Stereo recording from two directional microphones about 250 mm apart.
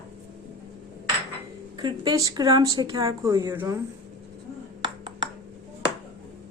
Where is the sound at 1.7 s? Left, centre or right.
Centre.